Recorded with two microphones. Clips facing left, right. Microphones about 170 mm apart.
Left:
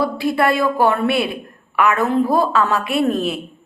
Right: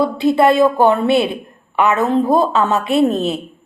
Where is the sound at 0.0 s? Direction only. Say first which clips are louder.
Right 5 dB; 20° right (ahead or behind).